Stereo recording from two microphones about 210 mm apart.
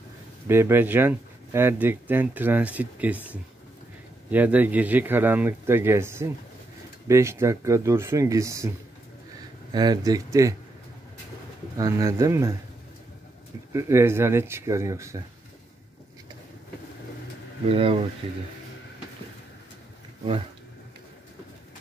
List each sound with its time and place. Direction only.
0.5 s speech: 10° right (ahead or behind)
4.3 s speech: 10° right (ahead or behind)
9.7 s speech: 20° right (ahead or behind)
11.7 s speech: 15° right (ahead or behind)
13.7 s speech: 10° right (ahead or behind)
17.6 s speech: 25° right (ahead or behind)